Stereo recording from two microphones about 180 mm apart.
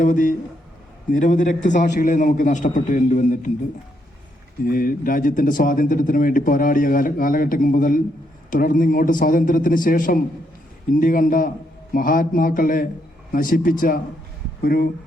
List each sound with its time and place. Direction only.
0.0 s speech: 45° left (ahead or behind)
4.6 s speech: 50° left (ahead or behind)